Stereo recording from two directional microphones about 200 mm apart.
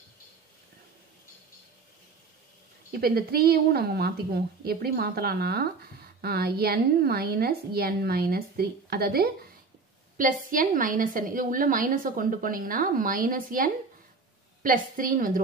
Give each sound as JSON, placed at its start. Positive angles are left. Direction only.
{"t": 2.9, "sound": "a woman's voice", "side_deg": -50}